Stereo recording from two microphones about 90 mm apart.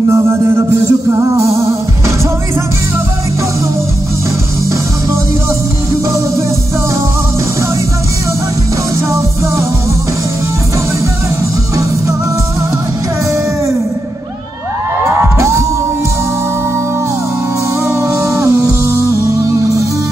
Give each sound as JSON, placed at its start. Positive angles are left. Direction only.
{"t": 0.1, "sound": "music", "side_deg": -30}
{"t": 15.3, "sound": "music", "side_deg": -35}
{"t": 17.8, "sound": "music", "side_deg": -35}